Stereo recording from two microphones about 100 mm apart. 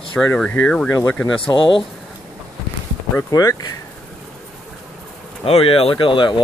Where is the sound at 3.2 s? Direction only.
35° left (ahead or behind).